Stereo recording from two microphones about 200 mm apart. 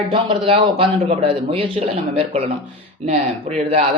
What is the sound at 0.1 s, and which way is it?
A man's voice, 25° right (ahead or behind).